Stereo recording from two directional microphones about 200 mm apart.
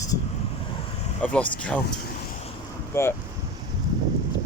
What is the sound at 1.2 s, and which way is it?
Speech, 5° left (ahead or behind).